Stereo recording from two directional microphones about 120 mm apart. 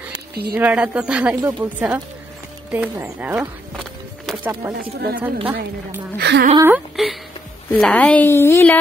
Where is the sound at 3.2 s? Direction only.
15° right (ahead or behind).